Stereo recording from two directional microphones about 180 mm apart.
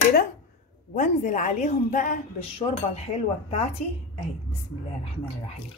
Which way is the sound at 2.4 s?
35° left (ahead or behind).